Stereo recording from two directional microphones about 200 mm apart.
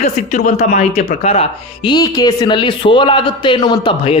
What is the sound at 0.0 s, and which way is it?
Speech, 35° left (ahead or behind).